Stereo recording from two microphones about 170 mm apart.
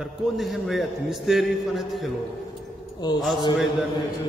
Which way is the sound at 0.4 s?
Centre (ahead or behind).